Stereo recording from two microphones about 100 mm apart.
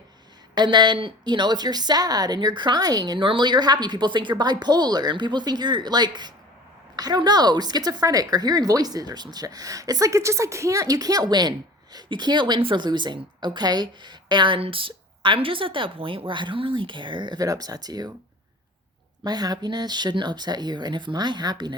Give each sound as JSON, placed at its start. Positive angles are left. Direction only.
{"t": 0.5, "sound": "a woman's voice", "side_deg": -50}
{"t": 19.2, "sound": "a woman's voice", "side_deg": -40}